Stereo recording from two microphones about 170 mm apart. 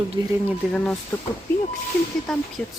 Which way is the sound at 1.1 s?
10° left (ahead or behind).